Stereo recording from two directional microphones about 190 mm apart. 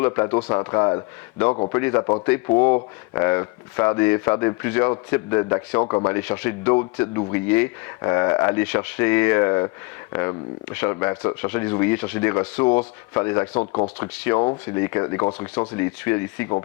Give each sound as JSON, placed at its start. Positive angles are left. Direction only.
{"t": 0.0, "sound": "a man's voice", "side_deg": 20}
{"t": 13.6, "sound": "a man's voice", "side_deg": 25}